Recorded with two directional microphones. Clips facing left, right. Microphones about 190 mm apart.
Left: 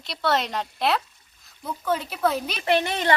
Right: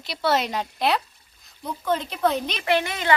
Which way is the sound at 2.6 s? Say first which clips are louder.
Left 3 dB; 35° left (ahead or behind).